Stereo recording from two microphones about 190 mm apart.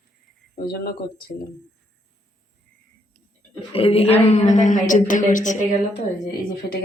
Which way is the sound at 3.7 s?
30° left (ahead or behind).